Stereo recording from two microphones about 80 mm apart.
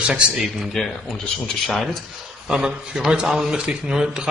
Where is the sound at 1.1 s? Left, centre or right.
Centre.